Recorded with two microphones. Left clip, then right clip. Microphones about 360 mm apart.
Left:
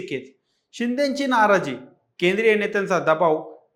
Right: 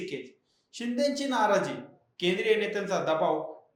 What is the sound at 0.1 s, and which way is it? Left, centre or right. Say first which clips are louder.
Speech: left 7 dB; left.